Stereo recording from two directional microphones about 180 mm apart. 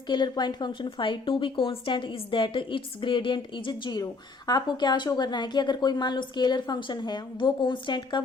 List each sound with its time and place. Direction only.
0.1 s a woman's voice: 25° left (ahead or behind)